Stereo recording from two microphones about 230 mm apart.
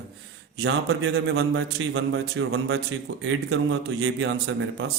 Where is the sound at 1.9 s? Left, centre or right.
Right.